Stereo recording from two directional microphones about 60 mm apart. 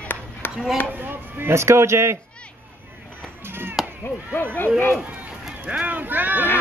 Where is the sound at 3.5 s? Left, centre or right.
Right.